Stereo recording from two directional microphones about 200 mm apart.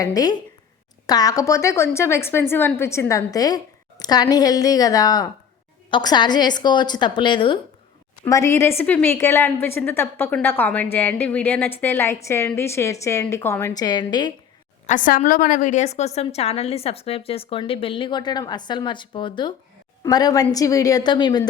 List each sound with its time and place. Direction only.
0.0 s a woman's voice: 20° left (ahead or behind)
14.8 s a woman's voice: 40° left (ahead or behind); by 21.4 s 20° left (ahead or behind)